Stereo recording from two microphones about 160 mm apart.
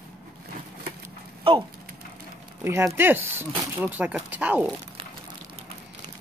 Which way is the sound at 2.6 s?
15° right (ahead or behind).